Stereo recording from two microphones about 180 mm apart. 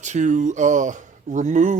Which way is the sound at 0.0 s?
40° right (ahead or behind).